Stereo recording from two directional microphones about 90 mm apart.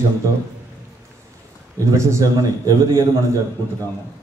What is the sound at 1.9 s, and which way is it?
Speech, 35° right (ahead or behind).